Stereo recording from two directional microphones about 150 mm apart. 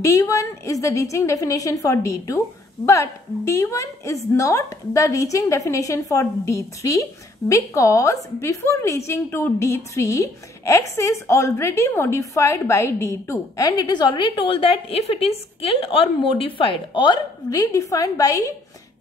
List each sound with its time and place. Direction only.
0.0 s a woman's voice: 20° left (ahead or behind)